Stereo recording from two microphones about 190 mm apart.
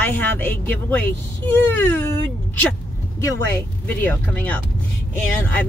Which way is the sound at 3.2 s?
10° left (ahead or behind).